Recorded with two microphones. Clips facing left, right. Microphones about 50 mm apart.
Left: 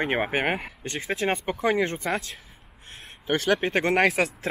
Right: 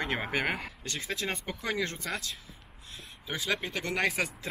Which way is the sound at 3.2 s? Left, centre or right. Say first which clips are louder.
Left 9 dB; left.